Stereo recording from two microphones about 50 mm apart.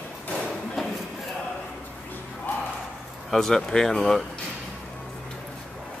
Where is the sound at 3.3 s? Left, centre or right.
Centre.